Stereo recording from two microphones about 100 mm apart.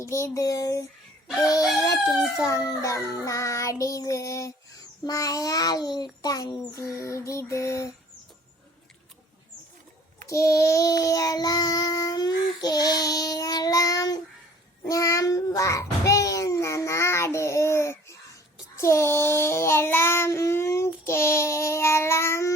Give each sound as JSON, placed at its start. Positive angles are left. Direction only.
{"t": 0.0, "sound": "child singing", "side_deg": 30}
{"t": 10.2, "sound": "child singing", "side_deg": 30}